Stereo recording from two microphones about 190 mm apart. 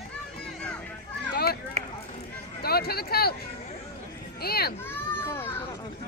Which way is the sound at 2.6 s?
55° left (ahead or behind).